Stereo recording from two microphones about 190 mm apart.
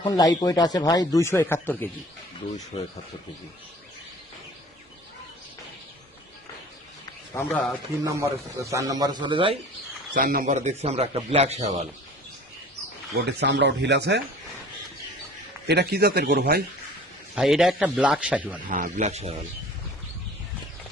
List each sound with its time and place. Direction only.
0.0 s speech: 20° left (ahead or behind)
7.3 s speech: 10° left (ahead or behind)
8.0 s a man's voice: 15° right (ahead or behind)
10.2 s a man's voice: 45° right (ahead or behind)
13.1 s a man's voice: 65° right (ahead or behind)
15.6 s a man's voice: 60° right (ahead or behind)
17.3 s a man's voice: centre (ahead or behind)
18.7 s a man's voice: 40° right (ahead or behind)